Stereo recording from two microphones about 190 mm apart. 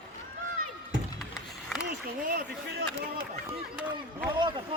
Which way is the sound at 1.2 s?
Centre (ahead or behind).